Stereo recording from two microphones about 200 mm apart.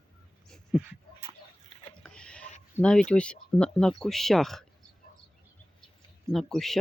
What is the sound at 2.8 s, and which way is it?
Speech, 5° left (ahead or behind).